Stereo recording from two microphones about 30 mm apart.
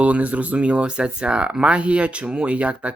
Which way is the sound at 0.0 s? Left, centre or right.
Right.